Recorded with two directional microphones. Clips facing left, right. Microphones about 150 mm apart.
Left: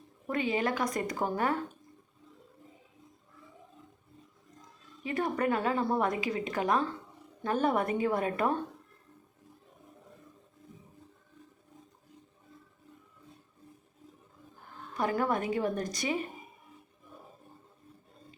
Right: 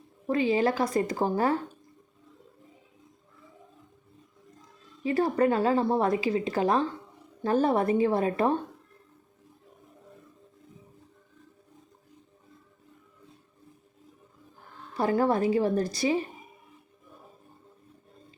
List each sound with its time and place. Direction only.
0.3 s a woman's voice: 30° right (ahead or behind)
5.0 s a woman's voice: 30° right (ahead or behind)
14.9 s a woman's voice: 30° right (ahead or behind)